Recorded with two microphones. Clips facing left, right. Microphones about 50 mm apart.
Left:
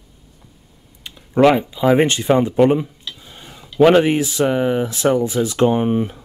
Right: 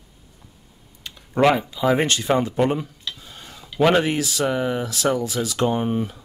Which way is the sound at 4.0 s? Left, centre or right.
Left.